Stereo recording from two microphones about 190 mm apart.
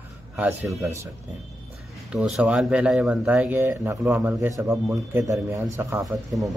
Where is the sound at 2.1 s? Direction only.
5° right (ahead or behind).